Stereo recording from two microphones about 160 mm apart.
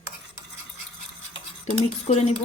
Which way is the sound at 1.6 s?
45° left (ahead or behind).